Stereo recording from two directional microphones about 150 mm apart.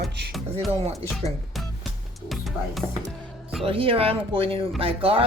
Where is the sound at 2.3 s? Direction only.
Centre (ahead or behind).